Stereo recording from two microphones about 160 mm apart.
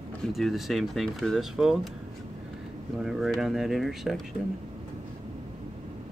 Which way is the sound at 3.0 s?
Centre (ahead or behind).